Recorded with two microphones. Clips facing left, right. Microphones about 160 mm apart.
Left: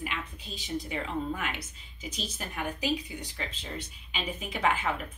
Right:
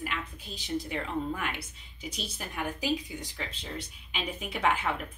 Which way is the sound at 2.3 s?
5° right (ahead or behind).